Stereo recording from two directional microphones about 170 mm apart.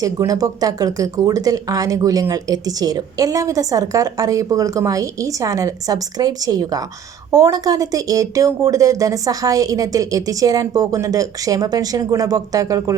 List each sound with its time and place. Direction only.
0.0 s speech: 20° right (ahead or behind)